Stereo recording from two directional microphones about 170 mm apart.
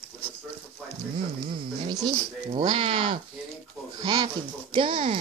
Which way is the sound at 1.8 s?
30° right (ahead or behind).